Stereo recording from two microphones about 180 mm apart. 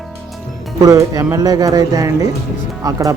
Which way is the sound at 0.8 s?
20° right (ahead or behind).